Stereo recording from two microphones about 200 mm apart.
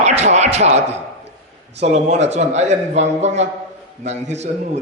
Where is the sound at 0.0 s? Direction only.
35° right (ahead or behind).